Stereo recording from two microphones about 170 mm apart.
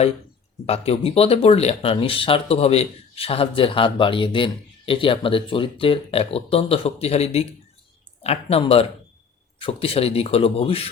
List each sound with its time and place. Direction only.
0.6 s speech: 35° left (ahead or behind)